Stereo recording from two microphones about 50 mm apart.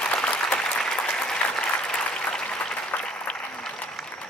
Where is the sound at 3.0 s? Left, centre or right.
Centre.